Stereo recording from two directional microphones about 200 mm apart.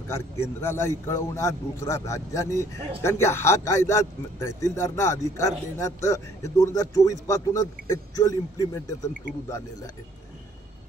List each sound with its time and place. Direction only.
0.1 s a man's voice: 15° left (ahead or behind)